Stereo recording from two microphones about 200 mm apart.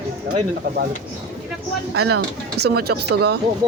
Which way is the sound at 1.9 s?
90° right.